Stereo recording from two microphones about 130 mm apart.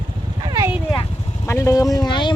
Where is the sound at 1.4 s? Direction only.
25° left (ahead or behind).